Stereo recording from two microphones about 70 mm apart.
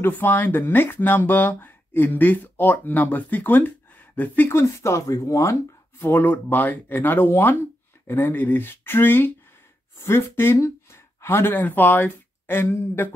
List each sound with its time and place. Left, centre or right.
0.0 s speech: left
6.1 s speech: left